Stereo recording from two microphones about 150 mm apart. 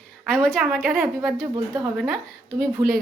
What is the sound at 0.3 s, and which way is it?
Speech, 5° left (ahead or behind).